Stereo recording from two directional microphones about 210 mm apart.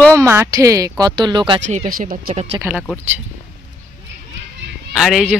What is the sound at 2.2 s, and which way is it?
Speech, 30° right (ahead or behind).